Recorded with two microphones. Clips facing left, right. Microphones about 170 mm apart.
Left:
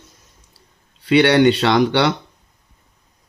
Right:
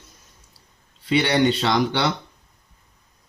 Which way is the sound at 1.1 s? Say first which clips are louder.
Left 6 dB; 70° left (ahead or behind).